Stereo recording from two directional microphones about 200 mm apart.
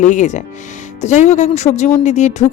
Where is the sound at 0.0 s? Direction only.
40° left (ahead or behind).